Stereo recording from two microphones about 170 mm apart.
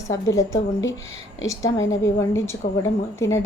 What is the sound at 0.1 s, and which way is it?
Speech, 20° left (ahead or behind).